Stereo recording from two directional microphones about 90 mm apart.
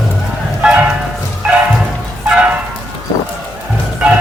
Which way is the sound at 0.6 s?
10° right (ahead or behind).